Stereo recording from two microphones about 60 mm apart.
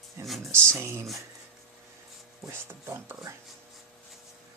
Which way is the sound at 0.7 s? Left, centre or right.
Right.